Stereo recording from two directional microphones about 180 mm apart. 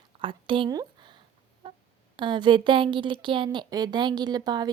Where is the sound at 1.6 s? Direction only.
25° right (ahead or behind).